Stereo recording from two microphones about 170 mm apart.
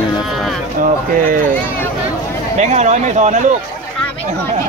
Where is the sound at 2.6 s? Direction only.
45° right (ahead or behind).